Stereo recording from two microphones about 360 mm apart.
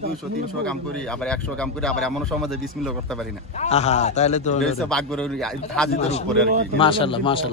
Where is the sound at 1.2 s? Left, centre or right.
Centre.